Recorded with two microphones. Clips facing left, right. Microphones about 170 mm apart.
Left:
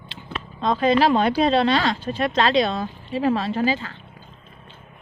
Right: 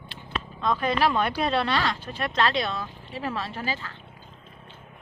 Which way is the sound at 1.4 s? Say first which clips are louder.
Left 6 dB; 90° left.